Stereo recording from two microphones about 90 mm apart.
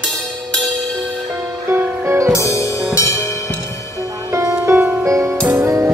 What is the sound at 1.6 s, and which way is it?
Music, 30° right (ahead or behind).